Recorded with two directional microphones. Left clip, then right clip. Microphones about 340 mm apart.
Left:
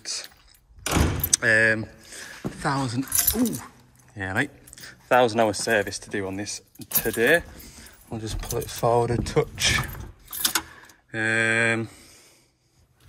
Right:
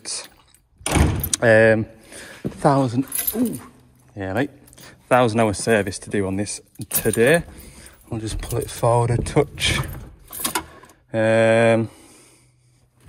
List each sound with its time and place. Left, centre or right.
0.0 s keys jangling: centre
1.3 s speech: centre
4.8 s speech: centre
10.9 s speech: centre